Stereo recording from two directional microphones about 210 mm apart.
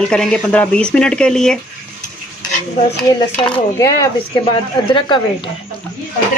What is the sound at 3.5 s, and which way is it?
A woman's voice, 15° left (ahead or behind).